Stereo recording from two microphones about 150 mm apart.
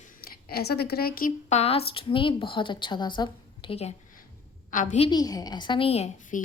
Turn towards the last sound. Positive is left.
turn(degrees=45)  # may be behind; listen again after turning